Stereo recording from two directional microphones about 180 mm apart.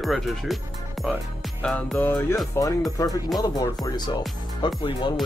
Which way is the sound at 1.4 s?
5° left (ahead or behind).